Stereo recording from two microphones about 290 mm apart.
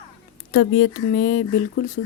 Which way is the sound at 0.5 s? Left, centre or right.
Left.